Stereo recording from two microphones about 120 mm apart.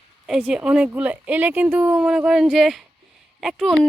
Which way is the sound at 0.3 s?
5° right (ahead or behind).